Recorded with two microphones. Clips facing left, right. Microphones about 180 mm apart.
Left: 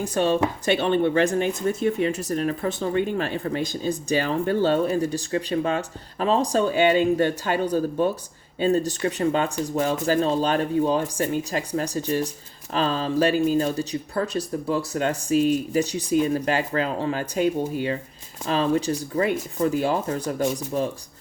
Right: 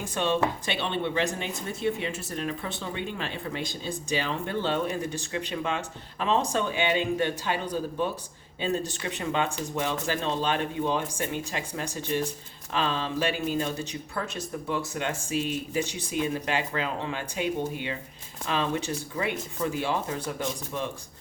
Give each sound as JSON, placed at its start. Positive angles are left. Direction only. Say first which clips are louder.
{"t": 0.0, "sound": "speech", "louder": "left 5 dB", "side_deg": 40}